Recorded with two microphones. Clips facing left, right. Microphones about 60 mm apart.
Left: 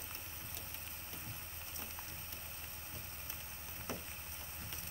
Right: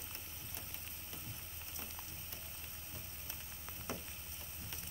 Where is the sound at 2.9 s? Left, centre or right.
Left.